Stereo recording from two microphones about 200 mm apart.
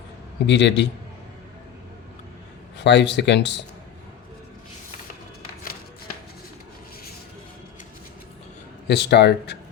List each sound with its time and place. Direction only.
0.4 s speech: 60° left (ahead or behind)
2.7 s speech: 60° left (ahead or behind)
8.9 s speech: 55° left (ahead or behind)